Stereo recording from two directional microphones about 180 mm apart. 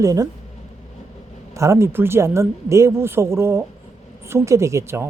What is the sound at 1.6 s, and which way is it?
Speech, 15° right (ahead or behind).